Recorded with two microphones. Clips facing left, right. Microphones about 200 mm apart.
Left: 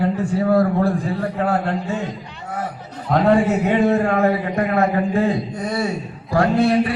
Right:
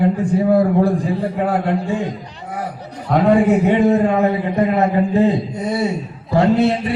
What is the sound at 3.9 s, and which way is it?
A man's voice, 20° right (ahead or behind).